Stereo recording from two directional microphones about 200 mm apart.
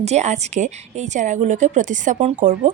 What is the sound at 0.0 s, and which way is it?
A woman's voice, 35° right (ahead or behind).